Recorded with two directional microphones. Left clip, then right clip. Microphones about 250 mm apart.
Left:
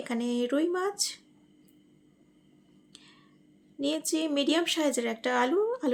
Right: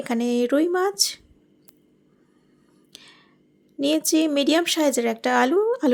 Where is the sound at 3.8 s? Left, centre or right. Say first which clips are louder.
Right 9 dB; right.